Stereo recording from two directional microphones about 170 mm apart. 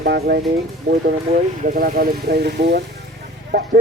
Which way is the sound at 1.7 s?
55° right (ahead or behind).